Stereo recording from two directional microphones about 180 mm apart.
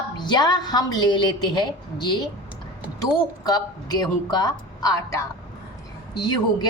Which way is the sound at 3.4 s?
20° left (ahead or behind).